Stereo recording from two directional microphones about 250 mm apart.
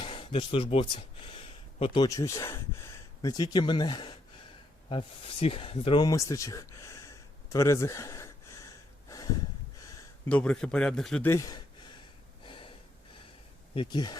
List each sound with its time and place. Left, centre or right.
0.0 s speech: centre
9.0 s snort: centre
10.2 s a man's voice: centre
12.5 s gasp: left
13.7 s speech: centre